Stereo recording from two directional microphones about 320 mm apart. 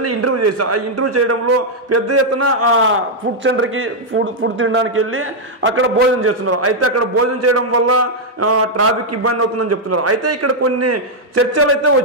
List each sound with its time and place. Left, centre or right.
0.0 s a man's voice: right